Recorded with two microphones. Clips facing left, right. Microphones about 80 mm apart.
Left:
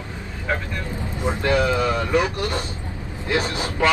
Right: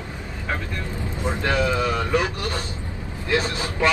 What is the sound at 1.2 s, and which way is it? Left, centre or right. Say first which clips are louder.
Speech: left 3 dB; left.